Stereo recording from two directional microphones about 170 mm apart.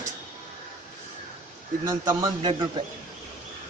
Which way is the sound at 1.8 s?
20° right (ahead or behind).